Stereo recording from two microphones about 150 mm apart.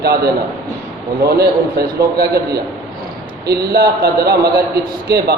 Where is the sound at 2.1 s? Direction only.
90° right.